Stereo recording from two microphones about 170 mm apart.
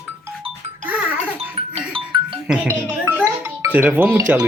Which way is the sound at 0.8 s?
10° right (ahead or behind).